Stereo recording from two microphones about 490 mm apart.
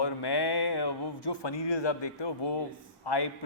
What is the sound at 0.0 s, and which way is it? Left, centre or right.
Speech, left.